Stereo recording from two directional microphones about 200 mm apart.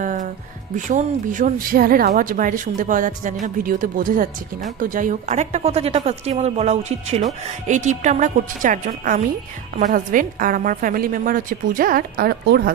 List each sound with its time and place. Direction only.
0.0 s music: 40° right (ahead or behind)
0.7 s a woman's voice: 40° right (ahead or behind)